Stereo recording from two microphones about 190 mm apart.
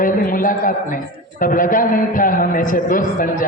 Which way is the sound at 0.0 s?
45° left (ahead or behind).